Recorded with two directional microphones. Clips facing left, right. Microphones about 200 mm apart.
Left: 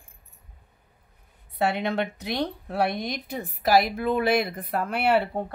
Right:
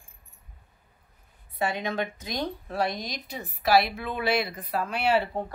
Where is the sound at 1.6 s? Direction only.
65° left (ahead or behind).